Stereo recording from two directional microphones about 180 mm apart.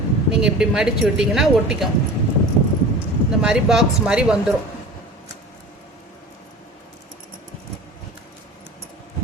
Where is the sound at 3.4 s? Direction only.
5° right (ahead or behind).